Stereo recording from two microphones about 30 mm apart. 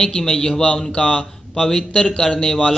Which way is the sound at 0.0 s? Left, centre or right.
Centre.